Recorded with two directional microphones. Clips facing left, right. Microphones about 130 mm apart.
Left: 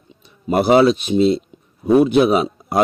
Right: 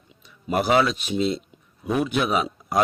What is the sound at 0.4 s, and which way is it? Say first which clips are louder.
A man's voice: left 7 dB; 35° left (ahead or behind).